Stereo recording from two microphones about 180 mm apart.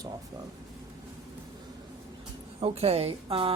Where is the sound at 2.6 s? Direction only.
35° right (ahead or behind).